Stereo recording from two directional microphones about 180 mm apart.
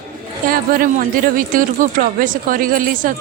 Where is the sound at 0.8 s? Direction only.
50° right (ahead or behind).